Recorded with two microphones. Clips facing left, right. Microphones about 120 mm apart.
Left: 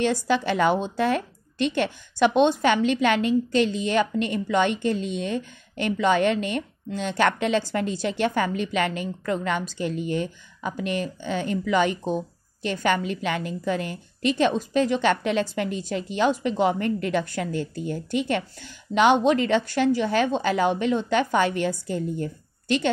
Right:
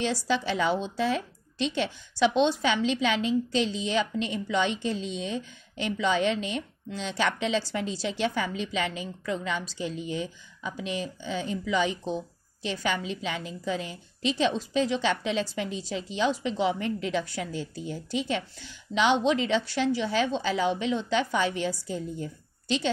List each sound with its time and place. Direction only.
0.0 s a woman's voice: 55° left (ahead or behind)